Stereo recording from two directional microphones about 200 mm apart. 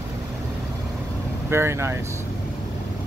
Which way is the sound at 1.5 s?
10° right (ahead or behind).